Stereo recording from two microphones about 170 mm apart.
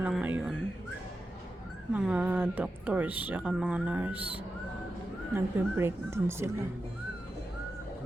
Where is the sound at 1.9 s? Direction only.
5° right (ahead or behind).